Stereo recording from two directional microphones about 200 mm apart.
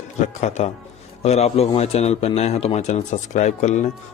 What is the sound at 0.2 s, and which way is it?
A man's voice, 35° left (ahead or behind).